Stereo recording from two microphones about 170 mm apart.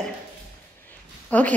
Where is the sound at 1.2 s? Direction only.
10° left (ahead or behind).